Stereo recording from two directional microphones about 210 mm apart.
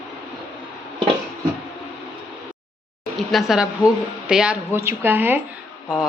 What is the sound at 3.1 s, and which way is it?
A woman's voice, centre (ahead or behind).